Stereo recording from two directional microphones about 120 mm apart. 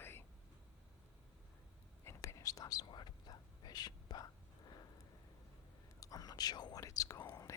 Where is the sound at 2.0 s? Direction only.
25° left (ahead or behind).